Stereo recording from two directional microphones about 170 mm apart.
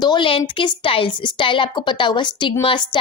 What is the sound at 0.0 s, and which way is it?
A woman's voice, 25° left (ahead or behind).